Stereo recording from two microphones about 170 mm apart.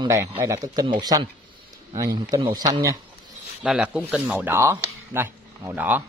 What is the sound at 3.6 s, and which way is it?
Speech, 5° right (ahead or behind).